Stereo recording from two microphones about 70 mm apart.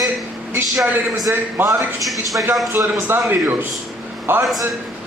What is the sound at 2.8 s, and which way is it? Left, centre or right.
A man's voice, right.